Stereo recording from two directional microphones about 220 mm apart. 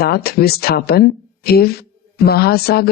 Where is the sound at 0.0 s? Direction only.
45° left (ahead or behind).